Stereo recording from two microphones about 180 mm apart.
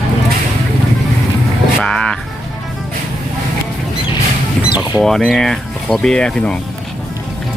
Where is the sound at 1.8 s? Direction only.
5° left (ahead or behind).